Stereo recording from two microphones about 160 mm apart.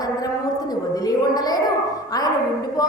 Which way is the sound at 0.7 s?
25° left (ahead or behind).